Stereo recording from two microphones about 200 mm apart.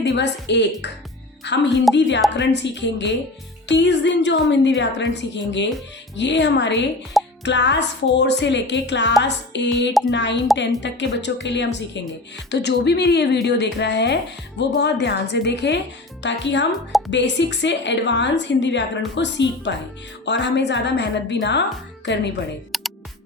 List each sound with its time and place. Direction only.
0.1 s a woman's voice: 60° left (ahead or behind)
22.7 s music: centre (ahead or behind)